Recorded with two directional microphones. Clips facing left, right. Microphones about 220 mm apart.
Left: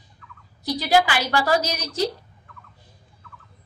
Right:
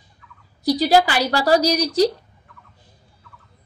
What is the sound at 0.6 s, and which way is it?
A woman's voice, 40° right (ahead or behind).